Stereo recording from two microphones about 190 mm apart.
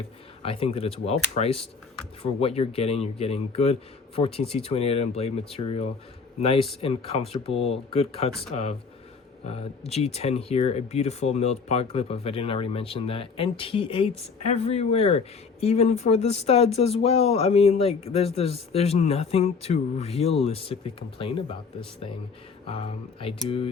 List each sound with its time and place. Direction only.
0.4 s speech: 30° left (ahead or behind)
9.5 s speech: 35° left (ahead or behind)
22.6 s speech: 30° left (ahead or behind)